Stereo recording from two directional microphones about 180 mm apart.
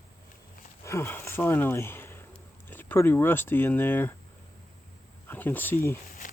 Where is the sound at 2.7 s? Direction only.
10° left (ahead or behind).